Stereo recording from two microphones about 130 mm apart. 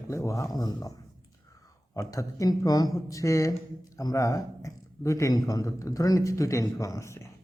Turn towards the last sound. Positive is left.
turn(degrees=20)  # may be behind; listen again after turning